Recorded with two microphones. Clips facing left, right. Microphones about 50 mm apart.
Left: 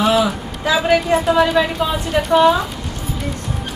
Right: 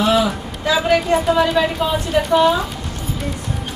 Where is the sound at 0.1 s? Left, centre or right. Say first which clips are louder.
Even; centre.